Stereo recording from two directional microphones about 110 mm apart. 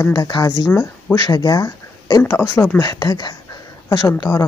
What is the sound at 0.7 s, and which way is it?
Speech, 20° left (ahead or behind).